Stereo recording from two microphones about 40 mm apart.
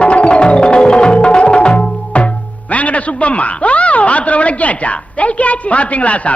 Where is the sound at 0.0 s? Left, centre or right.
Left.